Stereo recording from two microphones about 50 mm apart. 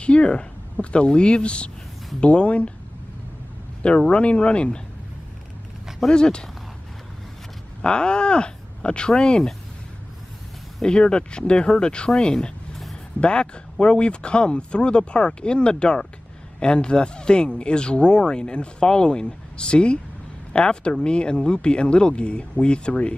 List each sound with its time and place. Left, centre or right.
0.0 s speech: left
3.8 s speech: left
6.0 s speech: centre
7.8 s speech: centre
10.8 s speech: centre
12.1 s a sound: centre
13.2 s speech: centre